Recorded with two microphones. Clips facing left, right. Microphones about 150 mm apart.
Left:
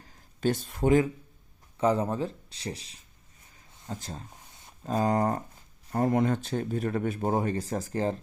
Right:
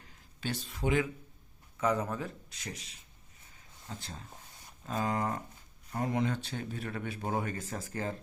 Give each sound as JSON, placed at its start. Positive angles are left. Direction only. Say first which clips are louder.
{"t": 0.0, "sound": "a sound", "louder": "left 12 dB", "side_deg": 45}
{"t": 1.8, "sound": "speech", "louder": "left 6 dB", "side_deg": 30}
{"t": 4.0, "sound": "speech", "louder": "left 5 dB", "side_deg": 40}